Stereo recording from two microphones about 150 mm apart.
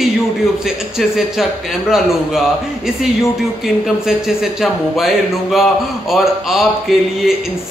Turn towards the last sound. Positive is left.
turn(degrees=0)  # may be behind; listen again after turning